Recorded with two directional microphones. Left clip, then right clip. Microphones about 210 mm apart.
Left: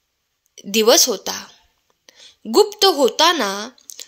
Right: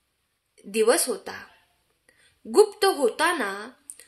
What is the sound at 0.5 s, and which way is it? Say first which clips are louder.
Speech: left 8 dB; 40° left (ahead or behind).